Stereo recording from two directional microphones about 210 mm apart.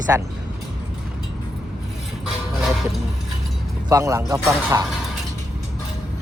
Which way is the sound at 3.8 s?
15° right (ahead or behind).